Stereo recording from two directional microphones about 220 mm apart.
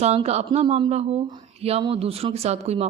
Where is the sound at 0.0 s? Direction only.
30° right (ahead or behind).